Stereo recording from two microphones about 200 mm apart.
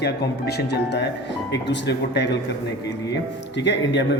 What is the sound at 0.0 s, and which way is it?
Speech, 55° left (ahead or behind).